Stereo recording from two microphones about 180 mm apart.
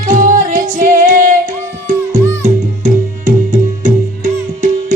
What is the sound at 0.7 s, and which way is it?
Female singing, 45° right (ahead or behind).